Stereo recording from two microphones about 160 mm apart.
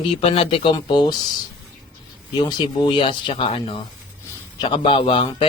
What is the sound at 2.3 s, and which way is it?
Speech, 30° left (ahead or behind).